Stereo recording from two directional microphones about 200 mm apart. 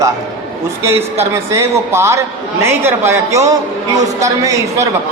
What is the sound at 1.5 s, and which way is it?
A man's voice, 15° right (ahead or behind).